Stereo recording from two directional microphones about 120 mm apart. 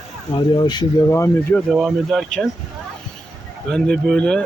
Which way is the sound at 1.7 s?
Centre (ahead or behind).